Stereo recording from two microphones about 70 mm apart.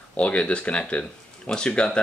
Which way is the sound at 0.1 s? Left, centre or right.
Centre.